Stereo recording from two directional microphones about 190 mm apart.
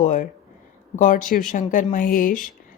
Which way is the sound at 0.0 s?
40° left (ahead or behind).